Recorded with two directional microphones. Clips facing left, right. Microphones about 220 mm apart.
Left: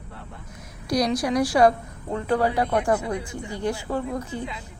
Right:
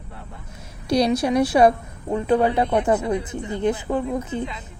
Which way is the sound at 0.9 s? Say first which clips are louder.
Right 4 dB; 25° right (ahead or behind).